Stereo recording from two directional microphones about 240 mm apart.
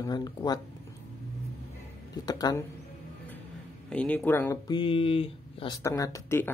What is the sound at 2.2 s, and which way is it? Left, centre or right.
Speech, centre.